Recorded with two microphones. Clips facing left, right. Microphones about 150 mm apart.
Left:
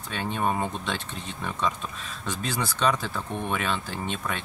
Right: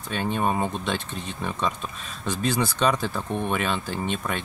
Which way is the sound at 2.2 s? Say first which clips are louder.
Right 5 dB; 15° right (ahead or behind).